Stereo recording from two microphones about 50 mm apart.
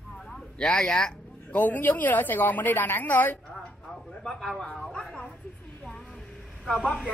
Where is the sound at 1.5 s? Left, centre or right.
Left.